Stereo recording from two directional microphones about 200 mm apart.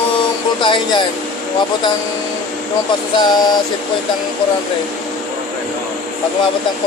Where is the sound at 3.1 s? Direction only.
20° left (ahead or behind).